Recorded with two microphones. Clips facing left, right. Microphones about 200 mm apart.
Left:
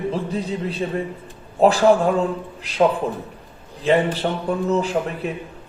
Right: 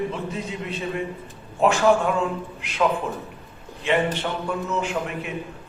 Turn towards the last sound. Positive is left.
turn(degrees=35)  # may be behind; listen again after turning